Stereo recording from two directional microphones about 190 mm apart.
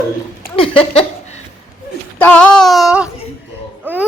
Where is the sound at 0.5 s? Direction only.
30° left (ahead or behind).